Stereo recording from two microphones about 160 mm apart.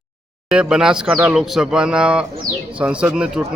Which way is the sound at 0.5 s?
5° right (ahead or behind).